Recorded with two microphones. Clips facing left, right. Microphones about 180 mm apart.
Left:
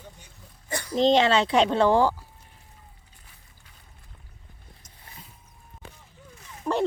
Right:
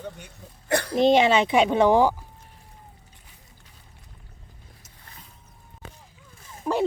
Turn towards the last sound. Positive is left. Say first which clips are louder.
# right 1 dB
turn(degrees=-5)  # may be behind; listen again after turning